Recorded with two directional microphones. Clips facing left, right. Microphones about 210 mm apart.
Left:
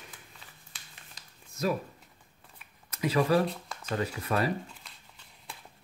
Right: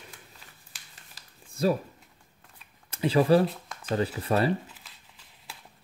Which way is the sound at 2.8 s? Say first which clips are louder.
Right 4 dB; 30° right (ahead or behind).